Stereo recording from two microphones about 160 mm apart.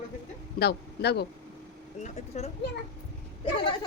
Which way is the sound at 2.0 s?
45° left (ahead or behind).